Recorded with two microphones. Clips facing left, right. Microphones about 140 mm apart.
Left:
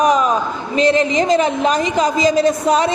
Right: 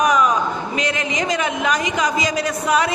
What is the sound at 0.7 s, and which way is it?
A woman's voice, 30° left (ahead or behind).